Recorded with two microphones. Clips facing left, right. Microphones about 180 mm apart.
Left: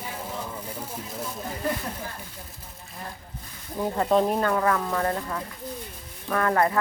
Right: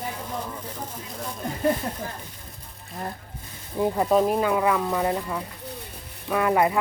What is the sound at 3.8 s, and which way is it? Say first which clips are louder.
Speech: right 2 dB; 10° right (ahead or behind).